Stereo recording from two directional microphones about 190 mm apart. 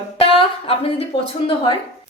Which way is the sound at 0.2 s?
30° left (ahead or behind).